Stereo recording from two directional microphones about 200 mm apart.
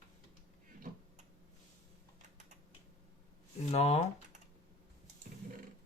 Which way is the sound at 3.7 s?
35° left (ahead or behind).